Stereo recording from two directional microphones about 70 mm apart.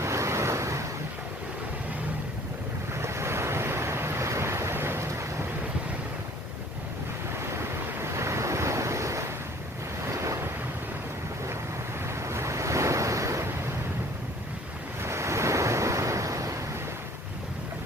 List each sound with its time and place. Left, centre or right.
0.0 s vehicle: right
2.9 s waves: right
7.3 s waves: right
12.0 s waves: right
15.0 s waves: right